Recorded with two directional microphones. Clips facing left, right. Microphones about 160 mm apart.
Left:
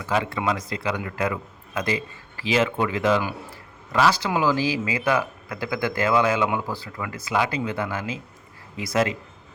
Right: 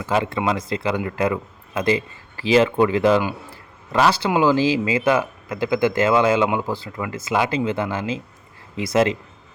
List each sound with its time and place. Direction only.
0.0 s speech: 25° right (ahead or behind)